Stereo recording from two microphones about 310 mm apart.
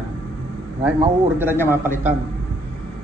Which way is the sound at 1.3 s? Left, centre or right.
Centre.